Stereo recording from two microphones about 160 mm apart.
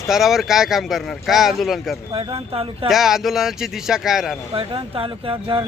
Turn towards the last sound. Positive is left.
turn(degrees=-30)  # may be behind; listen again after turning